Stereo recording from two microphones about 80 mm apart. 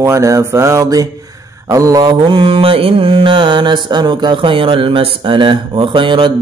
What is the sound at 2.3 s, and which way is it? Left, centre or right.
Speech, right.